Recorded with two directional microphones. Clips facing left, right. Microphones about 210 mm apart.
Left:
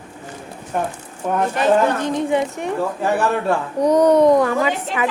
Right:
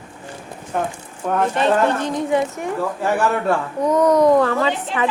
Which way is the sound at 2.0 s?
20° left (ahead or behind).